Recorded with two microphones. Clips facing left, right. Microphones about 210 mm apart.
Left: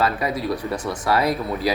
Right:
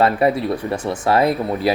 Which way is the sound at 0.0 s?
30° right (ahead or behind).